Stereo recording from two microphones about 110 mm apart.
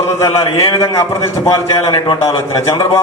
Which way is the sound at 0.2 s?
35° left (ahead or behind).